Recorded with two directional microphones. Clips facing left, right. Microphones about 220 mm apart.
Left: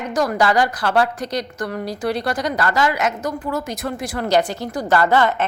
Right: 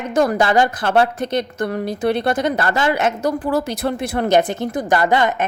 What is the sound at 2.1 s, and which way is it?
A woman's voice, 25° right (ahead or behind).